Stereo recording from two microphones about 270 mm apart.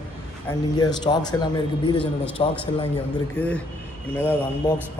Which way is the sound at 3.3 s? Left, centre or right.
Centre.